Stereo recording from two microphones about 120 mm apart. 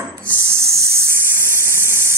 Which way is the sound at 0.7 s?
25° right (ahead or behind).